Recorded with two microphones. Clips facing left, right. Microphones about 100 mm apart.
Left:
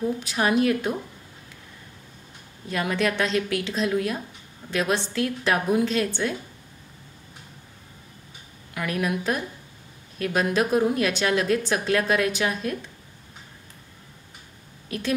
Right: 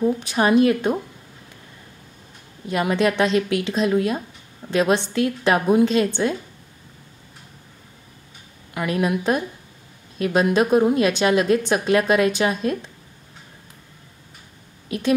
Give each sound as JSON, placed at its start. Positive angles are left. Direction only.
{"t": 0.0, "sound": "a woman's voice", "side_deg": -25}
{"t": 2.7, "sound": "a woman's voice", "side_deg": -20}
{"t": 8.7, "sound": "a woman's voice", "side_deg": -25}
{"t": 14.9, "sound": "a woman's voice", "side_deg": -20}